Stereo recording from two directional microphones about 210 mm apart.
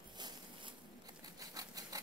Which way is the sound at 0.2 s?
20° right (ahead or behind).